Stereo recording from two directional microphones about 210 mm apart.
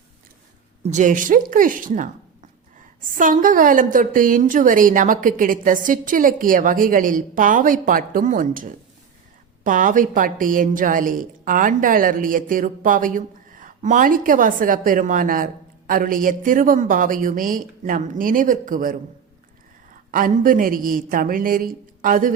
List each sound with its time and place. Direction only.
0.8 s a woman's voice: 35° right (ahead or behind)
20.1 s a woman's voice: 40° right (ahead or behind)